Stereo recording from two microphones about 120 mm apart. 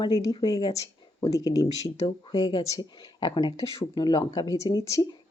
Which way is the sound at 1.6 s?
45° left (ahead or behind).